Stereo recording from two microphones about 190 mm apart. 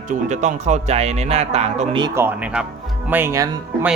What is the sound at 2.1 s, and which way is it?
Speech, 10° right (ahead or behind).